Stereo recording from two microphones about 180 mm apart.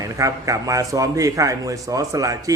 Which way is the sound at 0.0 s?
20° right (ahead or behind).